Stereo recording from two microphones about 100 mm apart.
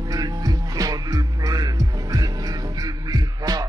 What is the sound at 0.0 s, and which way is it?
Music, 40° right (ahead or behind).